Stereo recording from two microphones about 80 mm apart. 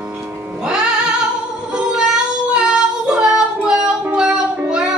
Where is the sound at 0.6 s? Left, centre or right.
Centre.